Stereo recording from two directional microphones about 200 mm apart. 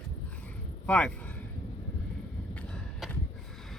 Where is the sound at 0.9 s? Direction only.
5° left (ahead or behind).